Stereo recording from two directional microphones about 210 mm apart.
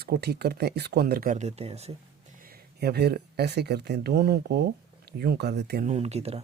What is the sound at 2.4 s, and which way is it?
Speech, 45° right (ahead or behind).